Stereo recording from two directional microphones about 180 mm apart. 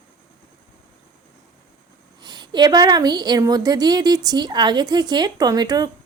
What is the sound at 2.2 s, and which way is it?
A woman's voice, 25° right (ahead or behind).